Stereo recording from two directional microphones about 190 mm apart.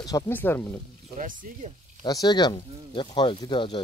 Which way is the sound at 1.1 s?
45° right (ahead or behind).